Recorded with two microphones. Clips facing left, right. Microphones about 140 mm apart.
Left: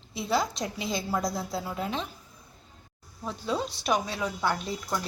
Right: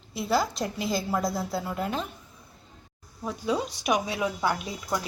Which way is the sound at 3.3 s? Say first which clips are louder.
Right 2 dB; 10° right (ahead or behind).